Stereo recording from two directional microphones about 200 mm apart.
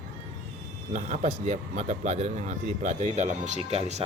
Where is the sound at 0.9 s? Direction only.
35° right (ahead or behind).